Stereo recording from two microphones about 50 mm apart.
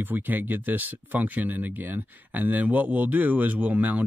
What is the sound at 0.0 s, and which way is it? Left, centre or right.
Speech, right.